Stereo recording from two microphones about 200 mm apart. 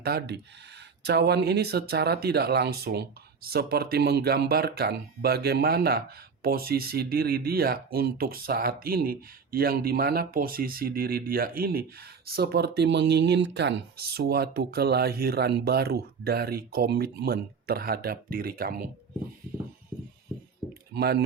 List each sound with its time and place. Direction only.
0.0 s speech: 55° right (ahead or behind)
20.9 s speech: 55° right (ahead or behind)